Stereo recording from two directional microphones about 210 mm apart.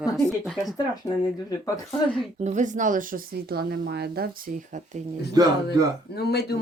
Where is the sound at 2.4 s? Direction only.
35° right (ahead or behind).